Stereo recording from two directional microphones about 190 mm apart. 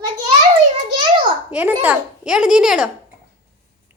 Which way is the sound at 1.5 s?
10° right (ahead or behind).